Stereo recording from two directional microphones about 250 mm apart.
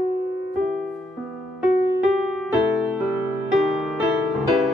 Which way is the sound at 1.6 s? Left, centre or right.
Centre.